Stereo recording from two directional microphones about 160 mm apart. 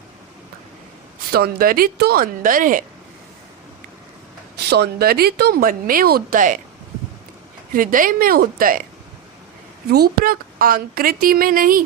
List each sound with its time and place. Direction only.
1.3 s a woman's voice: 70° right (ahead or behind)
4.7 s speech: 80° right; by 6.6 s 55° right (ahead or behind)
7.7 s a woman's voice: 60° right (ahead or behind)
9.9 s a woman's voice: 70° right (ahead or behind)